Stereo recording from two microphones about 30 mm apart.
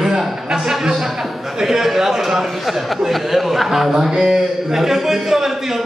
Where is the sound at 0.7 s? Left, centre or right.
Centre.